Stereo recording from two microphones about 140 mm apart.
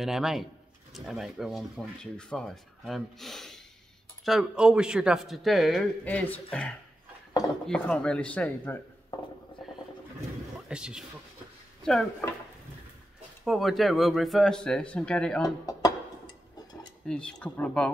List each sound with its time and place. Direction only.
0.0 s speech: centre (ahead or behind)
9.6 s wild animals: centre (ahead or behind)
10.7 s speech: 5° right (ahead or behind)
11.8 s speech: 5° left (ahead or behind)
13.4 s speech: centre (ahead or behind)
15.4 s speech: 25° left (ahead or behind)
17.0 s speech: 5° left (ahead or behind)